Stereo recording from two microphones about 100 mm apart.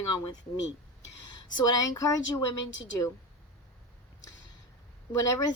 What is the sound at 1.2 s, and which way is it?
Speech, 40° left (ahead or behind).